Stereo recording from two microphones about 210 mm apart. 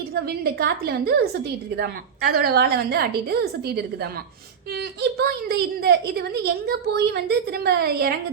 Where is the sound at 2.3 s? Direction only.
45° right (ahead or behind).